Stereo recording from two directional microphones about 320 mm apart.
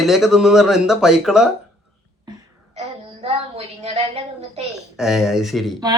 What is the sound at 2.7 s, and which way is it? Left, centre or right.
A woman's voice, centre.